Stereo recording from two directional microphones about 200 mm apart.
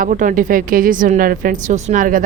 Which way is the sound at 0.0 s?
40° right (ahead or behind).